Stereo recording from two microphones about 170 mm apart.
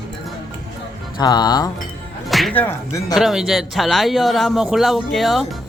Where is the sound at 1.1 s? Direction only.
25° left (ahead or behind).